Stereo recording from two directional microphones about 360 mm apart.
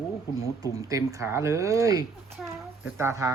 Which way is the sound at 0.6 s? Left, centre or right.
Centre.